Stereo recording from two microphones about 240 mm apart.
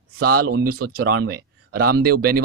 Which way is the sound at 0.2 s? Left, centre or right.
Right.